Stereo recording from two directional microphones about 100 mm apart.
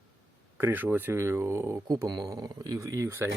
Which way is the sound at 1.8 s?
40° right (ahead or behind).